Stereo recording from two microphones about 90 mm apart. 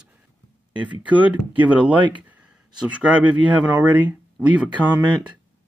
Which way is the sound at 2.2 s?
15° right (ahead or behind).